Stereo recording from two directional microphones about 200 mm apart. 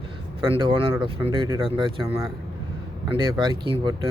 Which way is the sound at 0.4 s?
25° right (ahead or behind).